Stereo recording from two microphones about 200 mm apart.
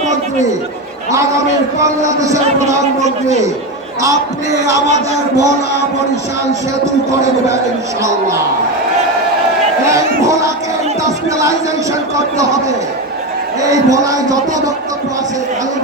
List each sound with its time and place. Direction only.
1.1 s a man's voice: 15° right (ahead or behind)
3.0 s a man's voice: 35° right (ahead or behind)
4.0 s a man's voice: 15° right (ahead or behind)
9.9 s a man's voice: 15° right (ahead or behind)
13.6 s a man's voice: 15° right (ahead or behind)